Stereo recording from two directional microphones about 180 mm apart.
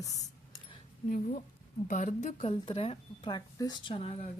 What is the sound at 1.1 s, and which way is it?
A woman's voice, 45° left (ahead or behind).